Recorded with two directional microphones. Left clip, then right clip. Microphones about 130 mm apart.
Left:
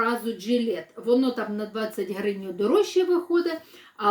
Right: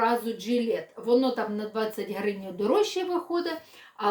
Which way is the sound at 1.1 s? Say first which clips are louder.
Even; 25° right (ahead or behind).